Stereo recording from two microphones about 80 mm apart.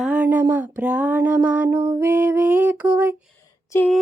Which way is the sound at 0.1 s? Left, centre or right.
Right.